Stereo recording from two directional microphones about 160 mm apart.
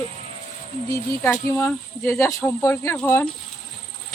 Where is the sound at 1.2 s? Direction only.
10° left (ahead or behind).